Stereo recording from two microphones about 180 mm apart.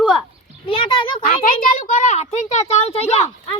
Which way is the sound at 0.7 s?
30° left (ahead or behind).